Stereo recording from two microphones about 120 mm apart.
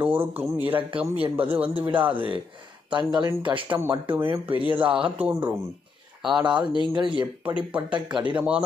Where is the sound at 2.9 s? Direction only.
40° right (ahead or behind).